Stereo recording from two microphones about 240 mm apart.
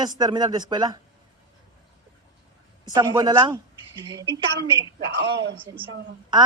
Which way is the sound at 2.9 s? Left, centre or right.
Centre.